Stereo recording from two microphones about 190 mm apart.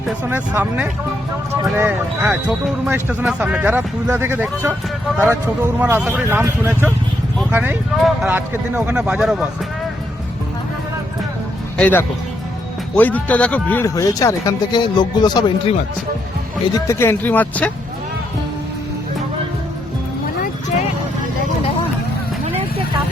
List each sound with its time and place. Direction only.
0.3 s speech: 10° right (ahead or behind)
11.8 s speech: 10° left (ahead or behind)
16.7 s speech: 15° left (ahead or behind)